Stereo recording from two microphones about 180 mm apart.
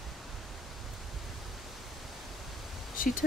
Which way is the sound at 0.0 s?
Centre (ahead or behind).